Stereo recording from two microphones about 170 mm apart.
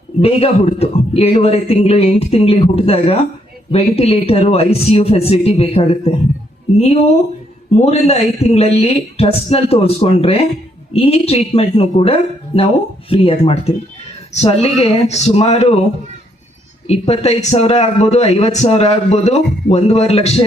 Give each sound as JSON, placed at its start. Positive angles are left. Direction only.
{"t": 0.2, "sound": "speech", "side_deg": 35}
{"t": 16.8, "sound": "speech", "side_deg": 40}